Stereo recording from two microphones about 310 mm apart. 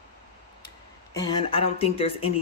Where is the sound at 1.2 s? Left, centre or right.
Centre.